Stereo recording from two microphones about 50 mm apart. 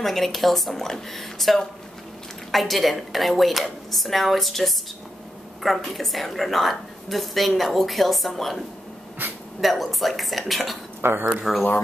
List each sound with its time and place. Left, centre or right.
0.0 s a woman's voice: centre
9.2 s speech: right
9.6 s a woman's voice: centre
11.0 s speech: right
11.5 s speech: centre